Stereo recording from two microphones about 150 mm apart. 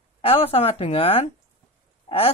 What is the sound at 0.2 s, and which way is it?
Speech, 40° left (ahead or behind).